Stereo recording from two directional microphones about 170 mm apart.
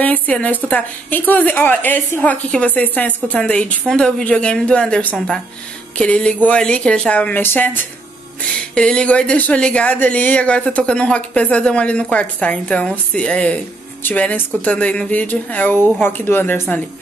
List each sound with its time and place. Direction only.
0.0 s a woman's voice: 10° left (ahead or behind)